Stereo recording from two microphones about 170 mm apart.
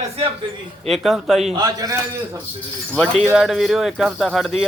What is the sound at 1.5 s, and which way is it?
Speech, 20° right (ahead or behind).